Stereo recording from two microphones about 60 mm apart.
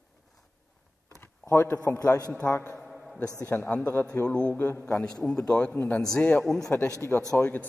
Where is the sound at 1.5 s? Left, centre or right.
Left.